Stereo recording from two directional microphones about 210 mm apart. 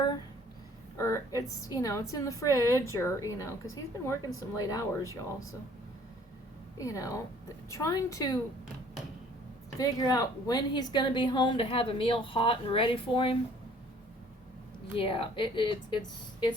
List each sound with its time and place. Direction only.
0.9 s a woman's voice: 15° left (ahead or behind)
6.7 s a woman's voice: 15° left (ahead or behind)
9.7 s a woman's voice: 15° left (ahead or behind)
14.9 s a woman's voice: 25° left (ahead or behind)